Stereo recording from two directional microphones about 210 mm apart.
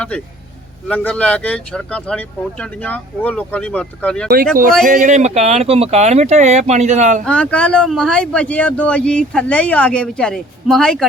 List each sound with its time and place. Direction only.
0.9 s speech: 5° left (ahead or behind)
4.9 s speech: 35° right (ahead or behind)
7.3 s speech: 5° left (ahead or behind)